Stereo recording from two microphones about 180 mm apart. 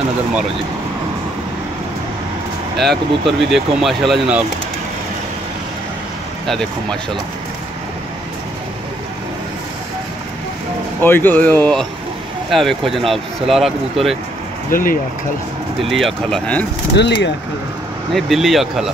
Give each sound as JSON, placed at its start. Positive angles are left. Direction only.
{"t": 2.8, "sound": "speech", "side_deg": 0}
{"t": 6.4, "sound": "speech", "side_deg": 0}
{"t": 11.0, "sound": "speech", "side_deg": 10}
{"t": 14.7, "sound": "speech", "side_deg": 50}
{"t": 15.8, "sound": "speech", "side_deg": 0}
{"t": 16.9, "sound": "speech", "side_deg": 75}
{"t": 18.1, "sound": "speech", "side_deg": 0}